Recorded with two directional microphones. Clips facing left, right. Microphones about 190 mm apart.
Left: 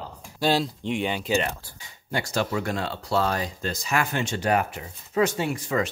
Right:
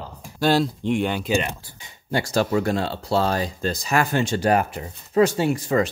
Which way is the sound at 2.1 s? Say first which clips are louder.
Right 5 dB; 35° right (ahead or behind).